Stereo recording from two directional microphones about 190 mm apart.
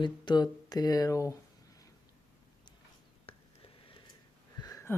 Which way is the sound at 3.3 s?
30° left (ahead or behind).